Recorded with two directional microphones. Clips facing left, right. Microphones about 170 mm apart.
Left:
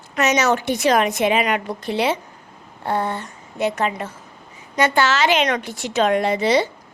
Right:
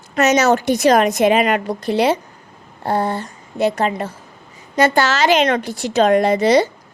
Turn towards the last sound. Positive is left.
turn(degrees=-40)  # may be behind; listen again after turning